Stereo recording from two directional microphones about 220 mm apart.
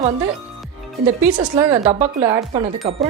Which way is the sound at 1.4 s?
20° right (ahead or behind).